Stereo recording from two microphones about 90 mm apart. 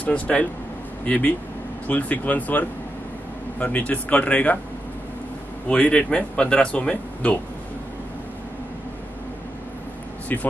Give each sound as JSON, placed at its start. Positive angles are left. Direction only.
{"t": 0.0, "sound": "speech", "side_deg": 15}
{"t": 5.7, "sound": "speech", "side_deg": 15}